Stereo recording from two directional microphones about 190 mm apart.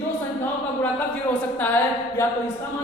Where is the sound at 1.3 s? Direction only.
10° left (ahead or behind).